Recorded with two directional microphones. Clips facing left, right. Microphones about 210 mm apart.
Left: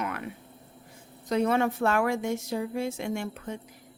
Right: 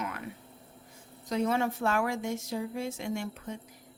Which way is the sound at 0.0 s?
65° left (ahead or behind).